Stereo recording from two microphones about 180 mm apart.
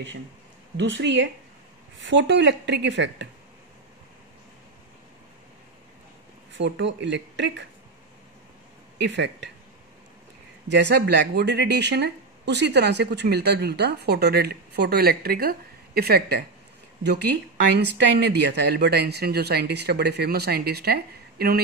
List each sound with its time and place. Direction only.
0.7 s a woman's voice: 80° right
6.5 s speech: 75° right (ahead or behind)
9.0 s speech: 75° right (ahead or behind)
10.7 s speech: 70° right (ahead or behind)
17.7 s speech: 70° right (ahead or behind)